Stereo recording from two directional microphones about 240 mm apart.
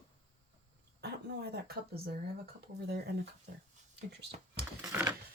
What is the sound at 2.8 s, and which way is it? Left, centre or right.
Speech, right.